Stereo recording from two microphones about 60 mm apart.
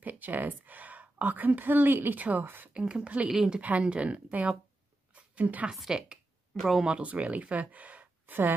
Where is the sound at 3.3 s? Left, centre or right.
Centre.